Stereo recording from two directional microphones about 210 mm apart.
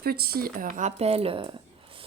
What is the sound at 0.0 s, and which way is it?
A woman's voice, 45° right (ahead or behind).